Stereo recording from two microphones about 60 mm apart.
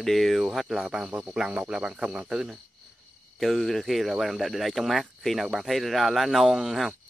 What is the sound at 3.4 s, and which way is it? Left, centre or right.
Speech, centre.